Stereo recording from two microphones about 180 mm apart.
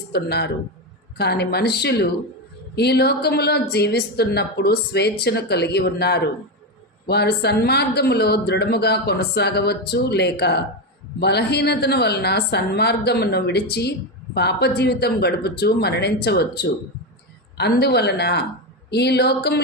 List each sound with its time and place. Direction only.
0.1 s speech: 65° left (ahead or behind)